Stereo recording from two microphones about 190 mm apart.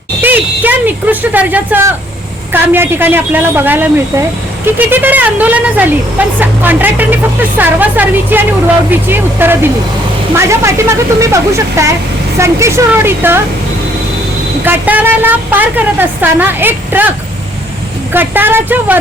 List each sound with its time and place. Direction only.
0.2 s a woman's voice: 10° right (ahead or behind)
14.6 s a woman's voice: 10° right (ahead or behind)
18.1 s a woman's voice: 10° right (ahead or behind)